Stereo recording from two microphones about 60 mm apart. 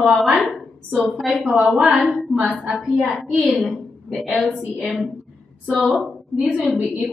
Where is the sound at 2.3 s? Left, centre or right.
Centre.